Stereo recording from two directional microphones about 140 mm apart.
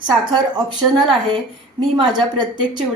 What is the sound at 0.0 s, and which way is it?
A woman's voice, 30° right (ahead or behind).